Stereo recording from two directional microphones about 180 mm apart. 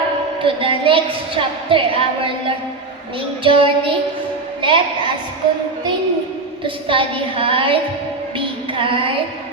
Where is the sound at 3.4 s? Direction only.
30° right (ahead or behind).